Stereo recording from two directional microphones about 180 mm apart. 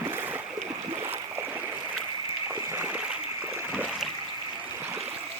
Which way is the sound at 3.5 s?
5° right (ahead or behind).